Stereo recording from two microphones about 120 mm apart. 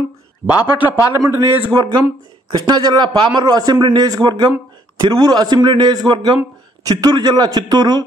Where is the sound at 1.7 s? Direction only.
35° right (ahead or behind).